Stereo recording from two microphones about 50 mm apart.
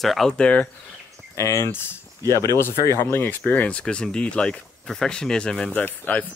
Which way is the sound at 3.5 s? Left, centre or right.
Left.